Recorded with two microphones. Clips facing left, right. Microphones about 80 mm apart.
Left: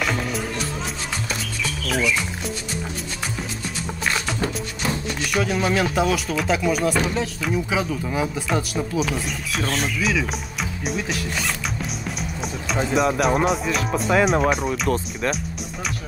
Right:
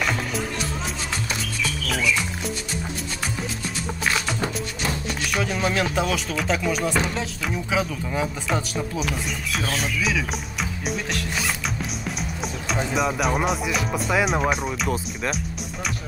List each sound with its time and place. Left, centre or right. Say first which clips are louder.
0.0 s music: left 1 dB; centre
4.0 s music: left 1 dB; centre
5.0 s speech: left 3 dB; centre
9.6 s music: left 3 dB; centre
12.7 s speech: left 4 dB; centre